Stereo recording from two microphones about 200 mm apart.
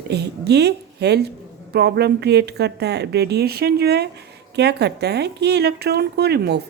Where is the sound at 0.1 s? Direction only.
55° right (ahead or behind).